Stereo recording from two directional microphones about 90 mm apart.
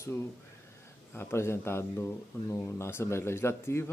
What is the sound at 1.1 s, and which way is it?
Speech, 25° left (ahead or behind).